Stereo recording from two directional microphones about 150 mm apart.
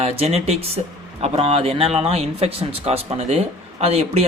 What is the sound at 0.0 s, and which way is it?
Speech, 45° right (ahead or behind).